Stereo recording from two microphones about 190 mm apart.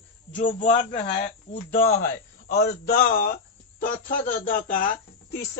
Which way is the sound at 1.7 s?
50° left (ahead or behind).